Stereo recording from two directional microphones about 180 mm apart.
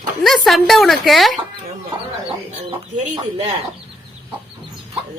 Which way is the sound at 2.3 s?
30° right (ahead or behind).